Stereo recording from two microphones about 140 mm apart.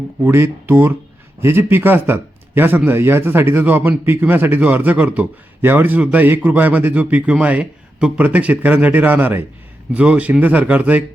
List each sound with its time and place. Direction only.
0.3 s speech: 15° right (ahead or behind)